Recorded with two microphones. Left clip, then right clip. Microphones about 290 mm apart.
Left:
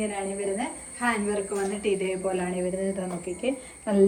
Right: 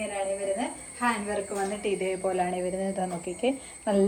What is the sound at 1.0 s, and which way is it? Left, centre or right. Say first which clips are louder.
A woman's voice: left 1 dB; centre.